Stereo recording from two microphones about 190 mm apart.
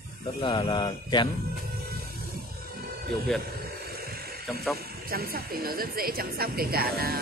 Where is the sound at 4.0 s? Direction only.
55° right (ahead or behind).